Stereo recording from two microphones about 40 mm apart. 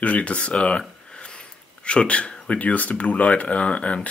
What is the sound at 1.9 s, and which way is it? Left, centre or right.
Speech, left.